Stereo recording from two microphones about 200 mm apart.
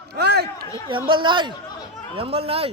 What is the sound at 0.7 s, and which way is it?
Speech, 25° right (ahead or behind).